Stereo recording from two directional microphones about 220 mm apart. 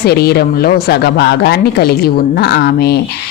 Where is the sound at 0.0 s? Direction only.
45° left (ahead or behind).